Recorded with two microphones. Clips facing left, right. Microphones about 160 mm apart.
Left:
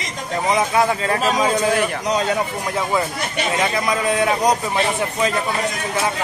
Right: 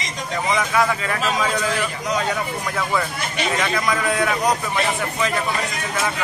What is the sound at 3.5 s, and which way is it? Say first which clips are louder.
Speech: left 3 dB; 25° left (ahead or behind).